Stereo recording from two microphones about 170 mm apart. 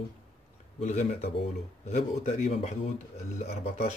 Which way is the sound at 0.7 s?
40° left (ahead or behind).